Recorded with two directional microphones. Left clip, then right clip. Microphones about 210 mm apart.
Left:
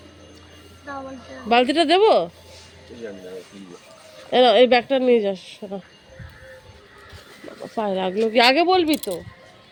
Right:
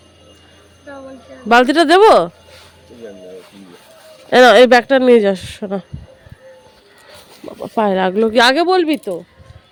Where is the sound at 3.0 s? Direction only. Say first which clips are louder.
Right 1 dB; 15° right (ahead or behind).